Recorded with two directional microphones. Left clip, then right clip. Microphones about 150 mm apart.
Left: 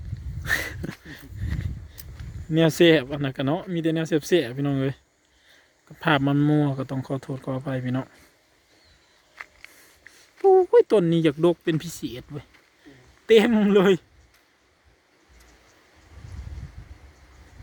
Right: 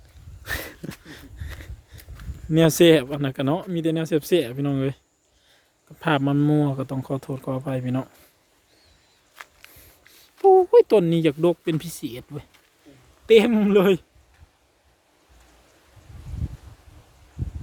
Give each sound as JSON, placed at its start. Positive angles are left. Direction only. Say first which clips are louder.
{"t": 0.4, "sound": "wheeze", "louder": "left 5 dB", "side_deg": 0}
{"t": 1.1, "sound": "a sound", "louder": "even", "side_deg": -15}
{"t": 2.5, "sound": "speech", "louder": "right 2 dB", "side_deg": -15}
{"t": 6.0, "sound": "speech", "louder": "even", "side_deg": 0}
{"t": 9.3, "sound": "a sound", "louder": "left 2 dB", "side_deg": -15}
{"t": 10.4, "sound": "speech", "louder": "right 2 dB", "side_deg": 0}